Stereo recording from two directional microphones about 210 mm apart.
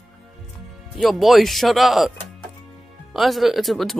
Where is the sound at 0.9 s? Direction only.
Centre (ahead or behind).